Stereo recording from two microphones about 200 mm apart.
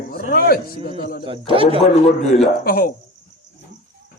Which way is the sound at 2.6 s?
50° left (ahead or behind).